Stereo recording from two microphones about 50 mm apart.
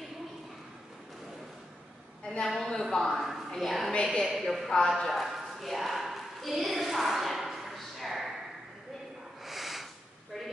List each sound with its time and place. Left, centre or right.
2.2 s a woman's voice: centre
4.0 s a woman's voice: centre
4.3 s a woman's voice: centre
4.8 s a sound: centre
9.4 s snort: centre